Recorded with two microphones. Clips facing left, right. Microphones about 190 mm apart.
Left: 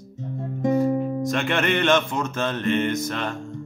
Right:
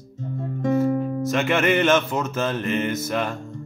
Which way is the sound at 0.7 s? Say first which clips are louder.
Even; 15° left (ahead or behind).